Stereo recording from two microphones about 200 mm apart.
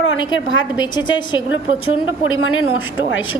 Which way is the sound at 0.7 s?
20° left (ahead or behind).